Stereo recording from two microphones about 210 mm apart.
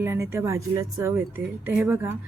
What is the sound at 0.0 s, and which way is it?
A woman's voice, 15° right (ahead or behind).